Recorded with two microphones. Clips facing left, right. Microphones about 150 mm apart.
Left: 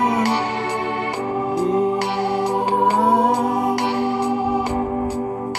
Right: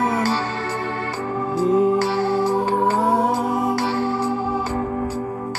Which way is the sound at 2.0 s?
20° left (ahead or behind).